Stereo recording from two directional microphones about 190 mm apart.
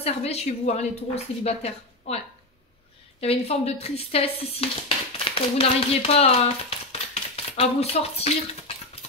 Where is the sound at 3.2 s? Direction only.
35° left (ahead or behind).